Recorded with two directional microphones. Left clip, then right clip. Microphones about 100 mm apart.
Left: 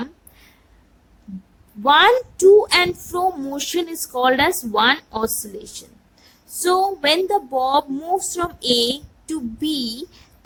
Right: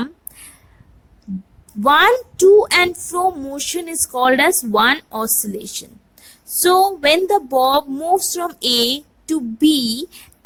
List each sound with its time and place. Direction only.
1.8 s child singing: 45° right (ahead or behind)
3.0 s speech: 30° right (ahead or behind)
5.1 s child singing: 45° right (ahead or behind)
7.9 s speech: 25° right (ahead or behind)
8.3 s child singing: 40° right (ahead or behind)